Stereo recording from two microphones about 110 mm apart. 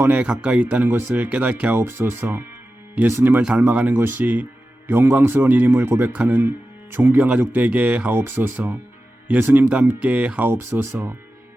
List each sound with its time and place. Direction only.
0.0 s a man's voice: 15° right (ahead or behind)